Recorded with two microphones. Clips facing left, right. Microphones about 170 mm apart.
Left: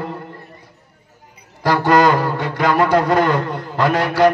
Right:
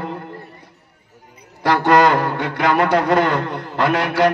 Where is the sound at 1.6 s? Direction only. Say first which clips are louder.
Even; 65° right (ahead or behind).